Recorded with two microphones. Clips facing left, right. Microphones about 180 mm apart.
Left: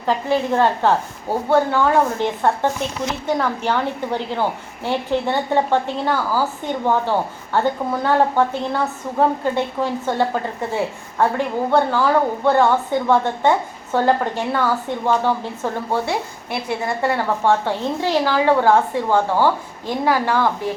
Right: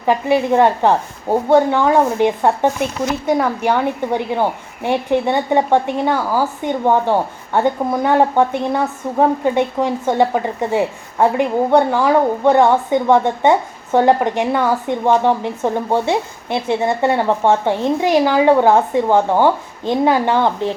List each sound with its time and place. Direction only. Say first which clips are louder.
0.0 s a woman's voice: right 4 dB; 15° right (ahead or behind)